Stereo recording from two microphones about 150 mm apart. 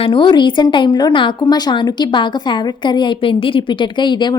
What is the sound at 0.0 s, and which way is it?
A woman's voice, 35° left (ahead or behind).